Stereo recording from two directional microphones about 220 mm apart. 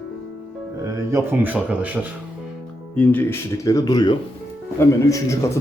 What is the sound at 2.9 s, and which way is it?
A man's voice, 5° left (ahead or behind).